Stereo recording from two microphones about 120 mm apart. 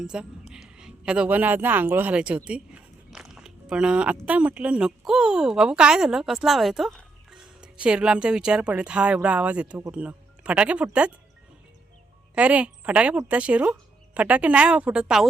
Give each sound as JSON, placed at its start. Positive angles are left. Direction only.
{"t": 0.0, "sound": "speech", "side_deg": -5}
{"t": 12.3, "sound": "speech", "side_deg": -10}